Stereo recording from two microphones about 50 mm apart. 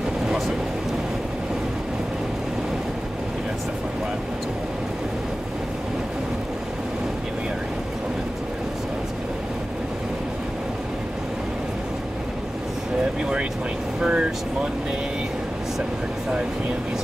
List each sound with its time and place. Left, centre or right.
14.0 s vehicle: centre